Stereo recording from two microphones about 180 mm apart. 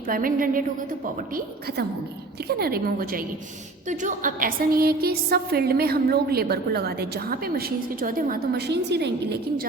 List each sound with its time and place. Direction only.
0.1 s a woman's voice: 50° right (ahead or behind); by 9.6 s 70° right (ahead or behind)